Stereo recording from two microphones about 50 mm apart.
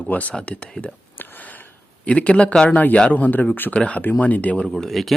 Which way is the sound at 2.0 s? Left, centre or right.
Left.